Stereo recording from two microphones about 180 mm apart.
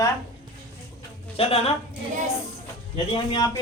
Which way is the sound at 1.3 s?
35° left (ahead or behind).